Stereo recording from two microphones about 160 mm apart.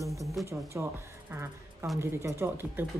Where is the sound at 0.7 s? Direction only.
15° right (ahead or behind).